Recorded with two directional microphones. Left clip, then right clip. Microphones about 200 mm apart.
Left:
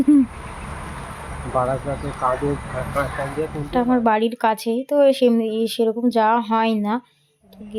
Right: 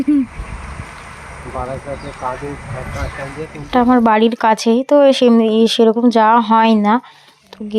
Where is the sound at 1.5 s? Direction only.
55° left (ahead or behind).